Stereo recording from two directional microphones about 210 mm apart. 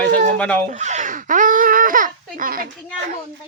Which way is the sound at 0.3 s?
5° left (ahead or behind).